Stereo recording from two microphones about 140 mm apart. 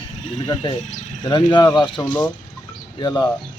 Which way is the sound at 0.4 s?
35° left (ahead or behind).